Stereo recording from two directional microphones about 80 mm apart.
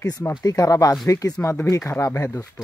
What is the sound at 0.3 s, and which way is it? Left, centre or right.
Speech, left.